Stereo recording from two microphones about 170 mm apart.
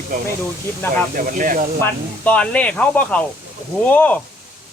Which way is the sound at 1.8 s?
10° left (ahead or behind).